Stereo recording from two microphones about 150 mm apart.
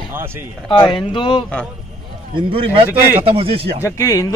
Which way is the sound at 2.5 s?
35° right (ahead or behind).